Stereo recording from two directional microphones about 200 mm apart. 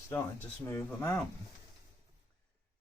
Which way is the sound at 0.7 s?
15° left (ahead or behind).